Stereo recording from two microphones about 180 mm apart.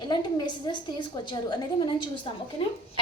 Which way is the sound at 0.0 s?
25° left (ahead or behind).